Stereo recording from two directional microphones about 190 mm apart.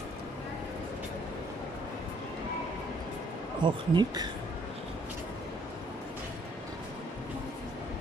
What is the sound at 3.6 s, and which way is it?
Speech, 25° right (ahead or behind).